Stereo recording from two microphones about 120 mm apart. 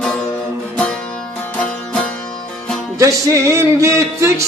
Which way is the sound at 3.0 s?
25° right (ahead or behind).